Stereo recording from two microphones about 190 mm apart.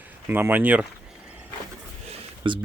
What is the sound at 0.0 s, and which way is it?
Speech, 10° right (ahead or behind).